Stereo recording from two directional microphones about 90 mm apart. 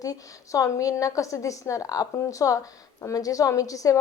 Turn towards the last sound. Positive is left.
turn(degrees=40)  # may be behind; listen again after turning